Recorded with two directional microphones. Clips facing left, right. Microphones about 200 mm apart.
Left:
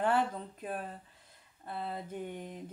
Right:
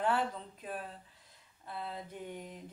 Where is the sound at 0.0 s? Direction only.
50° left (ahead or behind).